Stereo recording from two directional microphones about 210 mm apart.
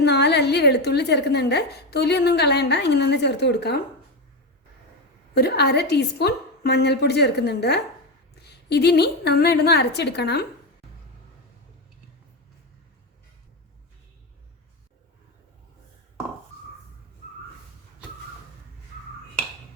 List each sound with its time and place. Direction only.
0.0 s a woman's voice: 50° left (ahead or behind)
5.3 s a woman's voice: 50° left (ahead or behind)